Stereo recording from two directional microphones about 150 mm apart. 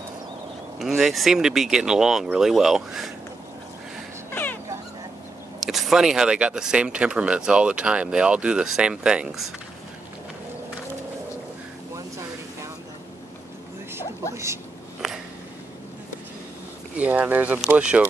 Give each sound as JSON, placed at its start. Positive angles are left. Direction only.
{"t": 0.7, "sound": "speech", "side_deg": 0}
{"t": 4.3, "sound": "dog", "side_deg": 10}
{"t": 5.6, "sound": "speech", "side_deg": 0}
{"t": 14.3, "sound": "speech", "side_deg": -20}
{"t": 15.0, "sound": "a sound", "side_deg": -5}
{"t": 16.9, "sound": "speech", "side_deg": -10}